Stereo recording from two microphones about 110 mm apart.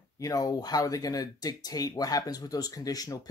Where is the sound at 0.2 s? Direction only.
35° left (ahead or behind).